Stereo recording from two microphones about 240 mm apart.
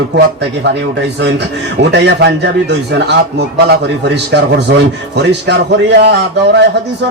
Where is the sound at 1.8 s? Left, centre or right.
Right.